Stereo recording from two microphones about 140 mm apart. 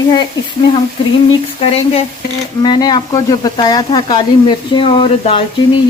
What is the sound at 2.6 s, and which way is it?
Sizzle, 30° left (ahead or behind).